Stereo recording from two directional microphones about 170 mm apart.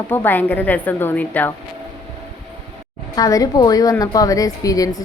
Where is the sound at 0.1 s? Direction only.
10° left (ahead or behind).